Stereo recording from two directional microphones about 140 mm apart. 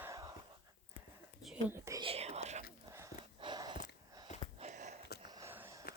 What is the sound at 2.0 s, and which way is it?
Whispering, 45° right (ahead or behind).